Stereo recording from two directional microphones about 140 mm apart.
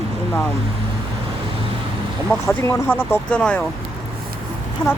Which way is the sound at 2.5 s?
15° left (ahead or behind).